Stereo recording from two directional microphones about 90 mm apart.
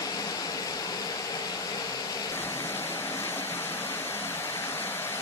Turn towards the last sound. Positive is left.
turn(degrees=25)  # may be behind; listen again after turning